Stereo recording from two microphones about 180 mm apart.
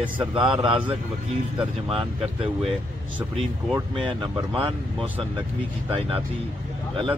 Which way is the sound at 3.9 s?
25° right (ahead or behind).